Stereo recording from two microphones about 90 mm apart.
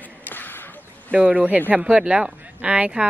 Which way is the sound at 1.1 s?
15° right (ahead or behind).